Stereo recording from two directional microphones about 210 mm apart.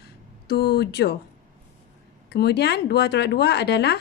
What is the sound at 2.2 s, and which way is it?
Speech, 50° left (ahead or behind).